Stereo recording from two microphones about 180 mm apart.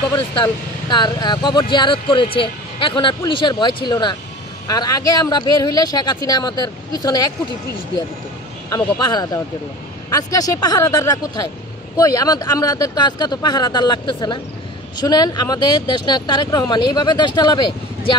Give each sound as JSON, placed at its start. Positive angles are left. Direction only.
{"t": 0.2, "sound": "speech", "side_deg": 30}
{"t": 8.6, "sound": "speech", "side_deg": 20}